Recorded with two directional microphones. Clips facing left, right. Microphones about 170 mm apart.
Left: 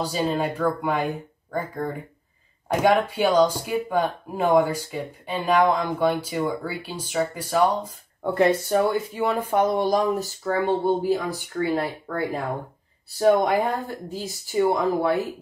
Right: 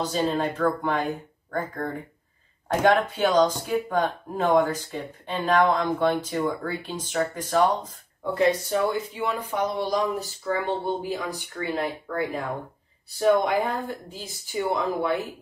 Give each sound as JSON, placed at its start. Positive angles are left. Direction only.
{"t": 0.0, "sound": "speech", "side_deg": 10}
{"t": 8.2, "sound": "speech", "side_deg": 55}